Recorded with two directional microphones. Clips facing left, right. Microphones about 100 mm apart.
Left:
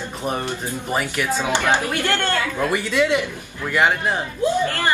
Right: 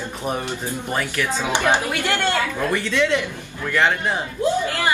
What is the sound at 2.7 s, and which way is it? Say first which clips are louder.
Speech: left 1 dB; 10° left (ahead or behind).